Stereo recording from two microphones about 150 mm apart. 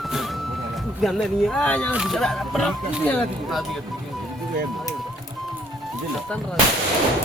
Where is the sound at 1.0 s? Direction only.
5° left (ahead or behind).